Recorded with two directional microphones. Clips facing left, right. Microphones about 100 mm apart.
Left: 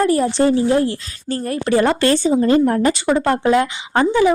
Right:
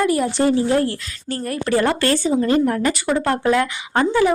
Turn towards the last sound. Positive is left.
turn(degrees=20)  # may be behind; listen again after turning